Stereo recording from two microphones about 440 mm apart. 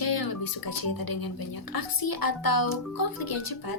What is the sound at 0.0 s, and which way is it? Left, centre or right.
Speech, left.